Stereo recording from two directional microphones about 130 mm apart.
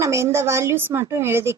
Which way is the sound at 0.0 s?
20° right (ahead or behind).